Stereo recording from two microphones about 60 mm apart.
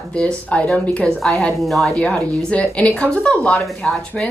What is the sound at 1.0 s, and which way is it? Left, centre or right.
Speech, centre.